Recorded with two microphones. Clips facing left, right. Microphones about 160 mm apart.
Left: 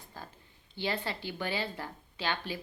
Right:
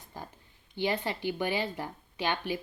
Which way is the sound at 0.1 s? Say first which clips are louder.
Right 3 dB; 15° right (ahead or behind).